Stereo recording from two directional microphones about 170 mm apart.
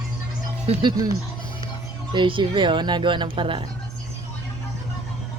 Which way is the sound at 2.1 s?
30° right (ahead or behind).